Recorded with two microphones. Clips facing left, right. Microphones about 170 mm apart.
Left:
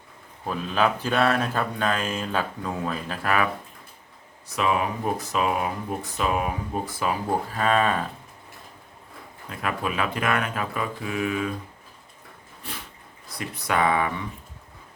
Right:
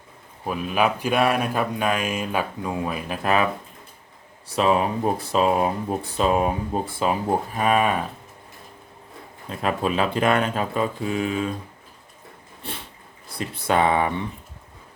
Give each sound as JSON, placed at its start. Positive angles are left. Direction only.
{"t": 0.4, "sound": "mantra", "side_deg": -10}
{"t": 4.4, "sound": "speech", "side_deg": -30}
{"t": 9.5, "sound": "speech", "side_deg": -30}
{"t": 12.6, "sound": "speech", "side_deg": -30}